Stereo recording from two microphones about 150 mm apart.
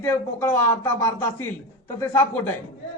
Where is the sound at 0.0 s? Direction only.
15° left (ahead or behind).